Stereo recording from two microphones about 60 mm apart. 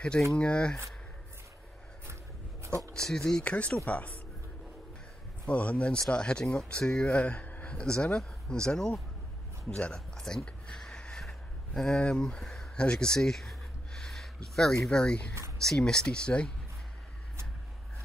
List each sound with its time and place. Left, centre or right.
0.3 s speech: centre
3.0 s speech: centre
3.4 s speech: left
5.5 s speech: left
9.9 s a sound: centre
14.9 s speech: centre